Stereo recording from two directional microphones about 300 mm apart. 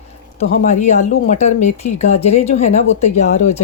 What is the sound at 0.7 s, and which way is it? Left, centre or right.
Speech, left.